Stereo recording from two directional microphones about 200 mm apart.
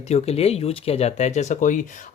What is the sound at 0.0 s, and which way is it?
Speech, 30° left (ahead or behind).